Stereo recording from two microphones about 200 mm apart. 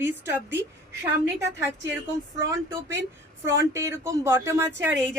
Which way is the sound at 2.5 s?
15° right (ahead or behind).